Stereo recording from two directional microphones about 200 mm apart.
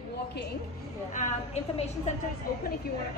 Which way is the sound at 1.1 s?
35° left (ahead or behind).